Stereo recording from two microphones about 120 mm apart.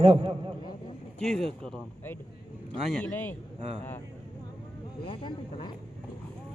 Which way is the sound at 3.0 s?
15° left (ahead or behind).